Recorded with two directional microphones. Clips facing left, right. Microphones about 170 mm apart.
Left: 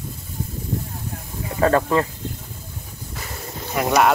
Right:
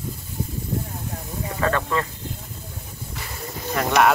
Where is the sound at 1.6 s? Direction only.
30° left (ahead or behind).